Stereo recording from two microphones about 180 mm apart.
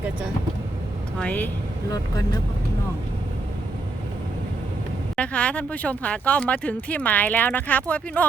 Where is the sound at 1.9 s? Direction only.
20° left (ahead or behind).